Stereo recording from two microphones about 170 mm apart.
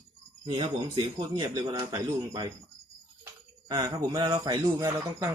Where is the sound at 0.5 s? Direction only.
30° right (ahead or behind).